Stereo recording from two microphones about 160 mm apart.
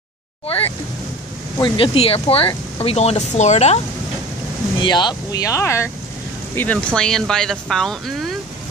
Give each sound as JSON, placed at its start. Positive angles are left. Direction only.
{"t": 1.6, "sound": "speech", "side_deg": 35}
{"t": 4.8, "sound": "speech", "side_deg": 25}